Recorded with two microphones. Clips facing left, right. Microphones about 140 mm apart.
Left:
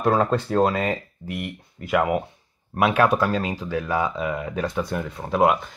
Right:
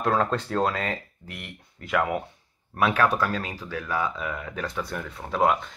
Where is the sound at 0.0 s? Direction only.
10° left (ahead or behind).